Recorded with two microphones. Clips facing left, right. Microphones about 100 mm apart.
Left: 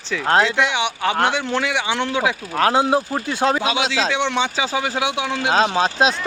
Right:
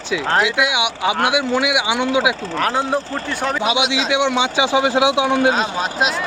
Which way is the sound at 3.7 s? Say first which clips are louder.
Right 2 dB; 20° right (ahead or behind).